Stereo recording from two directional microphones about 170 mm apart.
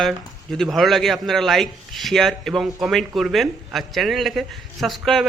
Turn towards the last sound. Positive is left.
turn(degrees=0)  # may be behind; listen again after turning